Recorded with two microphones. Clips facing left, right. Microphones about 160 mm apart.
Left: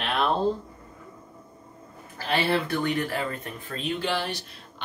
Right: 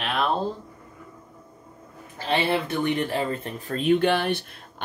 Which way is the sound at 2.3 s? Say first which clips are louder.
Right 1 dB; 20° right (ahead or behind).